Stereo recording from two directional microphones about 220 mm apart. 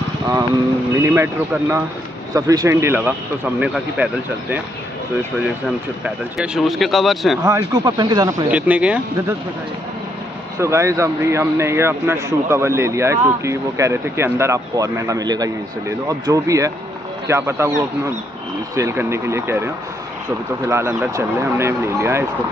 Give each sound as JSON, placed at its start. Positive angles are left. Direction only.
{"t": 0.9, "sound": "speech", "side_deg": -10}
{"t": 6.0, "sound": "speech", "side_deg": -5}
{"t": 7.4, "sound": "speech", "side_deg": -15}
{"t": 8.5, "sound": "speech", "side_deg": -5}
{"t": 10.6, "sound": "speech", "side_deg": -15}
{"t": 18.8, "sound": "speech", "side_deg": -10}